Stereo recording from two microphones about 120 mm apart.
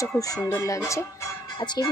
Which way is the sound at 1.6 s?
35° left (ahead or behind).